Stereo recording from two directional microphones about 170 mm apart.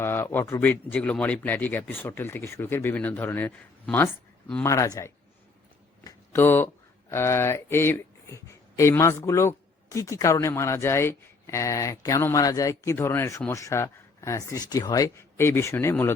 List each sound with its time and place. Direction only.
0.0 s speech: 15° left (ahead or behind)
6.1 s speech: 15° left (ahead or behind)